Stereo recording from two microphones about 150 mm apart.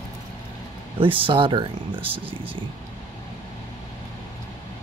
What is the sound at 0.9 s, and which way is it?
Speech, 35° right (ahead or behind).